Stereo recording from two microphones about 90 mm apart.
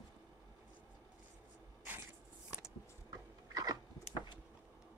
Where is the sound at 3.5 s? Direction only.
45° right (ahead or behind).